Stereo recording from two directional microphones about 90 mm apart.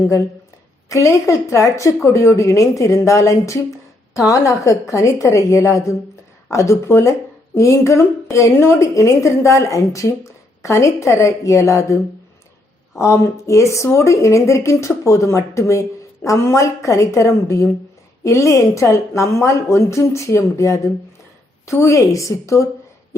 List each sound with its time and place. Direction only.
0.9 s speech: 35° left (ahead or behind)
13.0 s speech: 35° left (ahead or behind)